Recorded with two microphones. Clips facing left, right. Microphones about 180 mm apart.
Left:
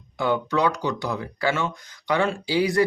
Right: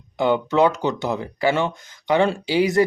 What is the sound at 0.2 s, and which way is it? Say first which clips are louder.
Speech: right 5 dB; 20° right (ahead or behind).